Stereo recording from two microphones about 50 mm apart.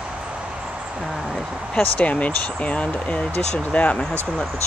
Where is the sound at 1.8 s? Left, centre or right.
Left.